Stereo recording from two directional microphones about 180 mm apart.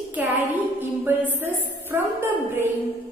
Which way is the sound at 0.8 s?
10° right (ahead or behind).